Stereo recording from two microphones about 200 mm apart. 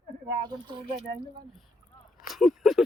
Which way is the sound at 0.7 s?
25° right (ahead or behind).